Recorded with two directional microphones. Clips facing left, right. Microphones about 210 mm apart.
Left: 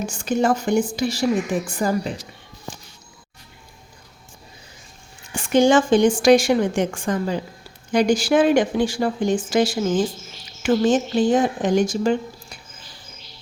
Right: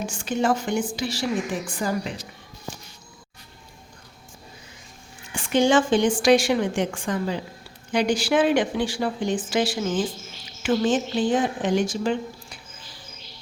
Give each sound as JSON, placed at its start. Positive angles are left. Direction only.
{"t": 0.0, "sound": "a woman's voice", "side_deg": 40}
{"t": 5.3, "sound": "a woman's voice", "side_deg": 45}